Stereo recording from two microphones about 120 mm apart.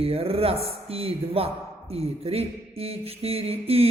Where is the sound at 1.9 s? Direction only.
55° right (ahead or behind).